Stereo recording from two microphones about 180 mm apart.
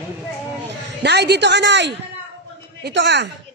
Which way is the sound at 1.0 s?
65° right (ahead or behind).